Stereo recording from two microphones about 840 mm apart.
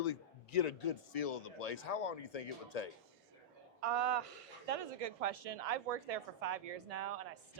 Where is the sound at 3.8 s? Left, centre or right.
Right.